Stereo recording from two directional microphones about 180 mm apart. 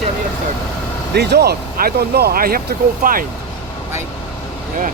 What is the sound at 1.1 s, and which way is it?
Speech, 65° right (ahead or behind).